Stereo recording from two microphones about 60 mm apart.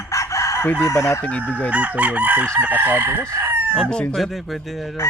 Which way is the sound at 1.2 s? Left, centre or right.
Left.